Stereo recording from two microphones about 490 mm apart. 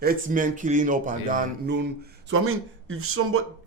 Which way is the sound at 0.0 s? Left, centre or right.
Centre.